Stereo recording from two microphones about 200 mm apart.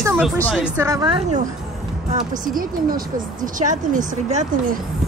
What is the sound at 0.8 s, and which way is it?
Speech, 20° right (ahead or behind).